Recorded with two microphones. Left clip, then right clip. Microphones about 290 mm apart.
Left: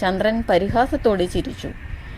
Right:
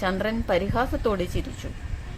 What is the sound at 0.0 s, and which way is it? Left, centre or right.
Speech, centre.